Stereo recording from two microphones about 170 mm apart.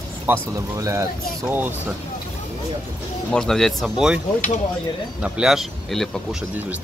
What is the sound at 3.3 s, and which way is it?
Speech, 5° left (ahead or behind).